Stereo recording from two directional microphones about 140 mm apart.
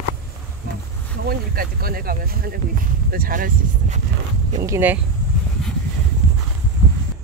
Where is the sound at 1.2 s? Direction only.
90° right.